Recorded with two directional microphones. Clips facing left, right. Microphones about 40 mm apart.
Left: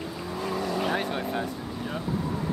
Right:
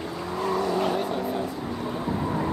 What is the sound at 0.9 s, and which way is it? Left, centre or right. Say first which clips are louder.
Vehicle: right 2 dB; left.